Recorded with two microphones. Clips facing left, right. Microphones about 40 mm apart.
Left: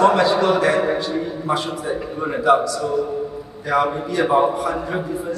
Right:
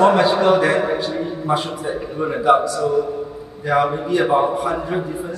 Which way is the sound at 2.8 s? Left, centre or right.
Centre.